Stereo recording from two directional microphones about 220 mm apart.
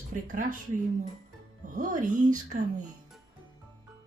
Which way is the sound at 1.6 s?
35° right (ahead or behind).